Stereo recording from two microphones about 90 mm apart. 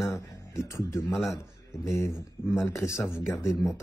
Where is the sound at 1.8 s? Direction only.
30° left (ahead or behind).